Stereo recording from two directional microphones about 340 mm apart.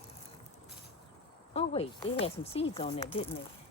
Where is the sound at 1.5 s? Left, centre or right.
Centre.